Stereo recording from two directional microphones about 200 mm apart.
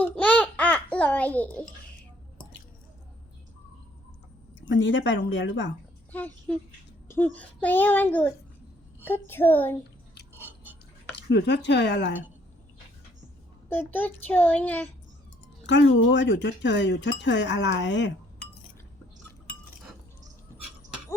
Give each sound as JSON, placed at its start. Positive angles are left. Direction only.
{"t": 0.0, "sound": "babbling", "side_deg": 5}
{"t": 4.7, "sound": "speech", "side_deg": 65}
{"t": 6.1, "sound": "a child's voice", "side_deg": 10}
{"t": 11.1, "sound": "speech", "side_deg": 60}
{"t": 13.7, "sound": "a child's voice", "side_deg": 10}
{"t": 15.6, "sound": "speech", "side_deg": 65}